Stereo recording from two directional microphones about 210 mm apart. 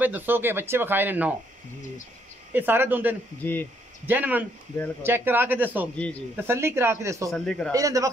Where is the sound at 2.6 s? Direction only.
10° right (ahead or behind).